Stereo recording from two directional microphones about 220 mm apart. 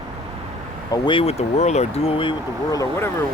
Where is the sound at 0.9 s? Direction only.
25° left (ahead or behind).